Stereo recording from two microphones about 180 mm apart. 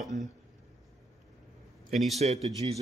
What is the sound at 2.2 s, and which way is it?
Speech, 35° right (ahead or behind).